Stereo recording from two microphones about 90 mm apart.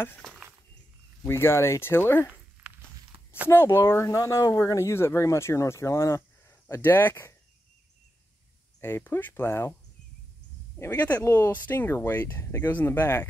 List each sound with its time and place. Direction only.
0.2 s a sound: 5° left (ahead or behind)
1.2 s speech: 25° left (ahead or behind)
2.6 s walk: 15° right (ahead or behind)
3.1 s a sound: 90° right
3.4 s speech: 25° left (ahead or behind)
6.7 s speech: 25° left (ahead or behind)
8.8 s speech: 25° left (ahead or behind)
10.8 s speech: 20° left (ahead or behind)